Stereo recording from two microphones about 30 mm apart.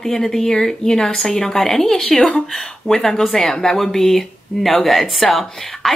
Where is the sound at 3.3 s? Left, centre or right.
Centre.